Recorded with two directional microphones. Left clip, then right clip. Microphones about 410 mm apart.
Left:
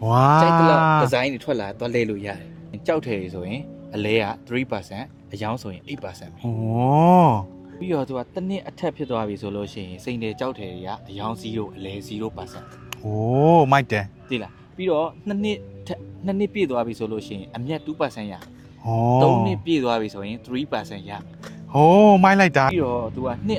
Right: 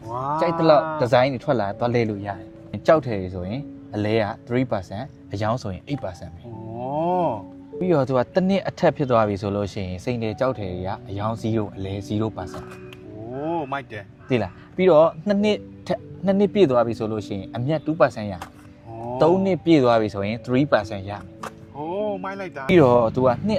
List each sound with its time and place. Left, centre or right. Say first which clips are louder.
0.1 s speech: left 9 dB; left
1.1 s speech: right 4 dB; centre
6.7 s groan: left 7 dB; left
7.9 s speech: right 4 dB; right
8.1 s speech: right 8 dB; right
13.4 s speech: left 11 dB; left
14.3 s speech: right 5 dB; right
18.9 s speech: left 11 dB; left
19.1 s speech: right 1 dB; right
21.8 s speech: left 14 dB; left
22.7 s speech: right 8 dB; right